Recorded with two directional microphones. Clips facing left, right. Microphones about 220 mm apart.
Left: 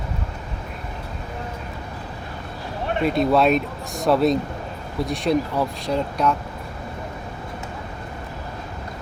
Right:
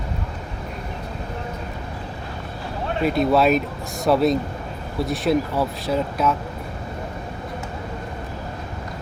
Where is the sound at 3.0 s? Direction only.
Centre (ahead or behind).